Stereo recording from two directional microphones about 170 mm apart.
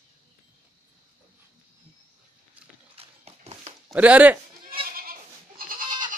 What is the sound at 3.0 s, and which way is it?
Horse, 40° right (ahead or behind).